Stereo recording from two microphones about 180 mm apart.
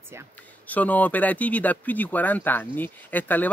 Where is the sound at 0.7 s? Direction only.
10° left (ahead or behind).